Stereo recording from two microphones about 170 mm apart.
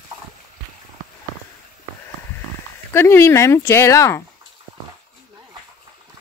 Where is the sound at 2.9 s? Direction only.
15° left (ahead or behind).